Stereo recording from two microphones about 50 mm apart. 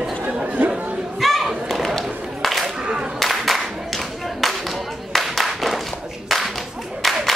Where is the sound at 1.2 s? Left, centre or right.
Centre.